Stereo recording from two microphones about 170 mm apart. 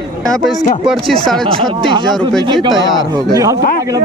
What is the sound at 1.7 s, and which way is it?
A man's voice, 25° right (ahead or behind).